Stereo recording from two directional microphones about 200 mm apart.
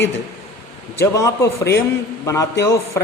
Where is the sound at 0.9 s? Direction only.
15° left (ahead or behind).